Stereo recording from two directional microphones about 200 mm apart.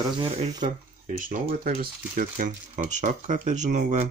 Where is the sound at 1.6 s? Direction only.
45° right (ahead or behind).